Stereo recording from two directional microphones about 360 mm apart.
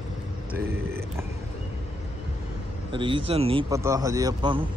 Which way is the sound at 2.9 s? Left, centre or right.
Centre.